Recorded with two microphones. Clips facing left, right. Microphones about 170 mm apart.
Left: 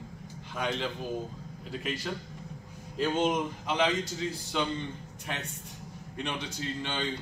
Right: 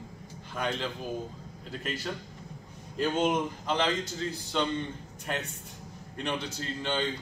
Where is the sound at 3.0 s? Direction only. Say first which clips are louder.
Right 1 dB; centre (ahead or behind).